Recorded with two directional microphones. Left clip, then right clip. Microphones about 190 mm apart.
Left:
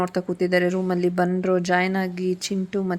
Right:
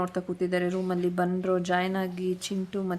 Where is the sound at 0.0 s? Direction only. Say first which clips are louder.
Left 6 dB; 25° left (ahead or behind).